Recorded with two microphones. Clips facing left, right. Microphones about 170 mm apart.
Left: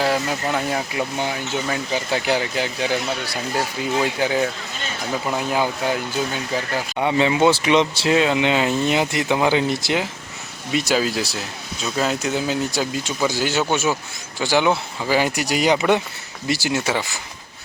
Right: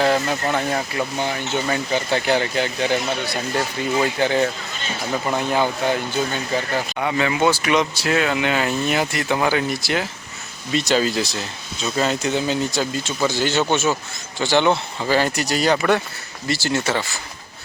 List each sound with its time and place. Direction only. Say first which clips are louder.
0.0 s speech: right 2 dB; 5° left (ahead or behind)
7.0 s speech: left 3 dB; 25° left (ahead or behind)